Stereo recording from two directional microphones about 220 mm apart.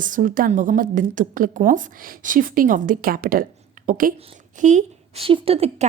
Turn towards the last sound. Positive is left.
turn(degrees=-25)  # may be behind; listen again after turning